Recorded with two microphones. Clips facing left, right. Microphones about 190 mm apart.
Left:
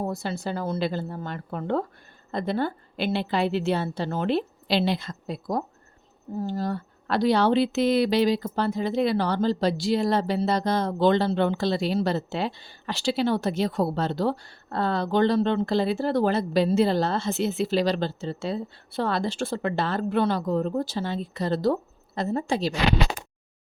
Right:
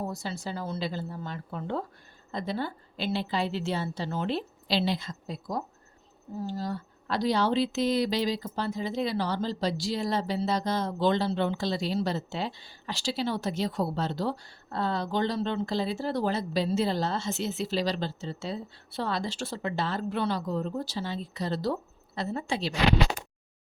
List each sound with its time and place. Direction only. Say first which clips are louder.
0.0 s speech: left 5 dB; 60° left (ahead or behind); by 22.7 s 45° left (ahead or behind)